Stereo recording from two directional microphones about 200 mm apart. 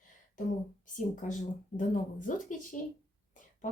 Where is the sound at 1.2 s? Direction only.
40° left (ahead or behind).